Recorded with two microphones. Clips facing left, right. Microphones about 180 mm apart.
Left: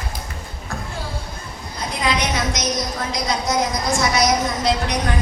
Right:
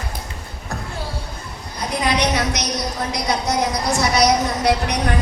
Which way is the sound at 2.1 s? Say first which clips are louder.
Right 2 dB; 65° right (ahead or behind).